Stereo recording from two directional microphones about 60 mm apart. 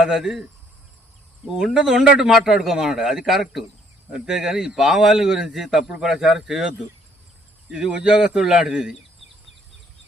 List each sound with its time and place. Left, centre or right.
0.0 s a man's voice: centre
1.5 s a man's voice: centre